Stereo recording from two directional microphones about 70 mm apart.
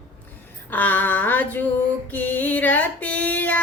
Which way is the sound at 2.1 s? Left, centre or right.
Left.